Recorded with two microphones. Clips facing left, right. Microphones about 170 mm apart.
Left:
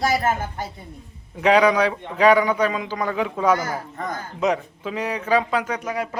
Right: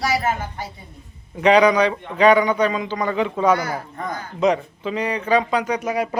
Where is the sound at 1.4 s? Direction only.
5° left (ahead or behind).